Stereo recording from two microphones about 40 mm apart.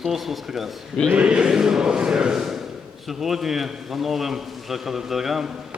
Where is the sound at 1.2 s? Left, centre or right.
Right.